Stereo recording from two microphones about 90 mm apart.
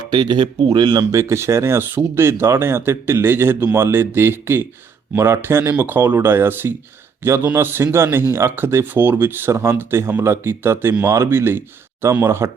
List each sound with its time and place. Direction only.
0.0 s speech: 60° right (ahead or behind)
1.1 s speech: 35° right (ahead or behind)